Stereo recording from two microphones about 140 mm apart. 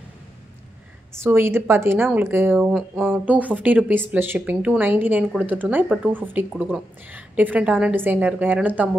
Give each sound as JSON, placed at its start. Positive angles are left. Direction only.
{"t": 1.2, "sound": "speech", "side_deg": -20}